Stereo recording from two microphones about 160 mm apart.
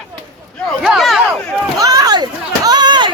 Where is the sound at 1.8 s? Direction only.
25° right (ahead or behind).